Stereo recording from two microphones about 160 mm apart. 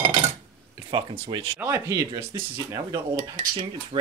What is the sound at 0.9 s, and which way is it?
Speech, 30° right (ahead or behind).